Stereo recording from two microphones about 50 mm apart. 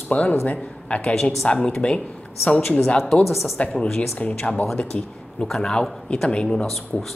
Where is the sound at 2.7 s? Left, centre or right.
Centre.